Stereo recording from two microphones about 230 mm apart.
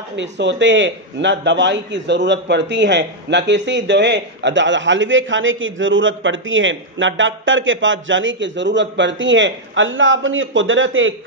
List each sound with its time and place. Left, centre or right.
0.1 s a man's voice: right